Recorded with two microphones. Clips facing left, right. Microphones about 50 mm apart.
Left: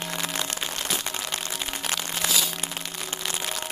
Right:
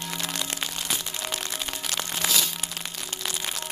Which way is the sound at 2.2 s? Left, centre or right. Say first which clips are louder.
Even; centre.